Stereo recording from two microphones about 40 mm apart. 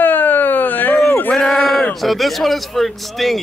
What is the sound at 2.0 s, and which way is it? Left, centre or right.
Speech, centre.